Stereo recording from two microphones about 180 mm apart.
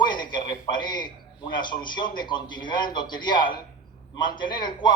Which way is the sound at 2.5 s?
25° left (ahead or behind).